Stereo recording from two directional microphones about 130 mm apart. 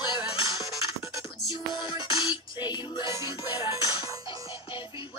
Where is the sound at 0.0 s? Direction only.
35° left (ahead or behind).